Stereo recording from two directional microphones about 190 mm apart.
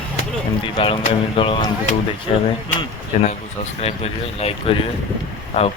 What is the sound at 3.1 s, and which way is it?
Speech, 40° left (ahead or behind).